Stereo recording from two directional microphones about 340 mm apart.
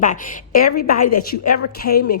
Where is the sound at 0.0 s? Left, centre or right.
Left.